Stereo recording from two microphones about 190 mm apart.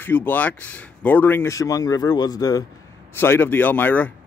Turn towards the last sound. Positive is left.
turn(degrees=10)  # may be behind; listen again after turning